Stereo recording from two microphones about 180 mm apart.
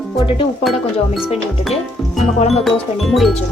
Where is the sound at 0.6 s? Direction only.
Centre (ahead or behind).